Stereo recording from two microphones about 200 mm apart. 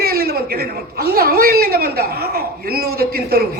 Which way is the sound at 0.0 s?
50° right (ahead or behind).